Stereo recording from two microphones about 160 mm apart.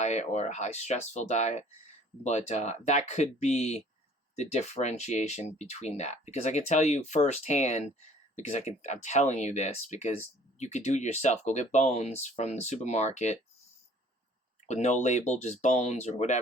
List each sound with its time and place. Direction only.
0.0 s speech: 45° left (ahead or behind)
14.7 s speech: 45° left (ahead or behind)